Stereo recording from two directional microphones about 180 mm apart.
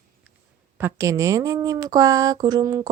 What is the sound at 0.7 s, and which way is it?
Speech, 15° right (ahead or behind).